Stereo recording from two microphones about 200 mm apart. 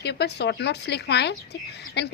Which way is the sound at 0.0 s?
55° left (ahead or behind).